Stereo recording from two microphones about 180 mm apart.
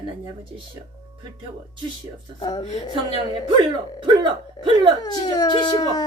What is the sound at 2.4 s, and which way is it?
Speech, 25° left (ahead or behind).